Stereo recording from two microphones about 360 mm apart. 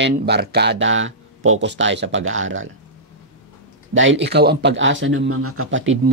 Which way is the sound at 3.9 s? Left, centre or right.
Right.